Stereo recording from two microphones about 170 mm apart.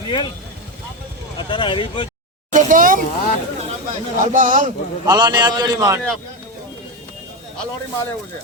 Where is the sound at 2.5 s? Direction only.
50° right (ahead or behind).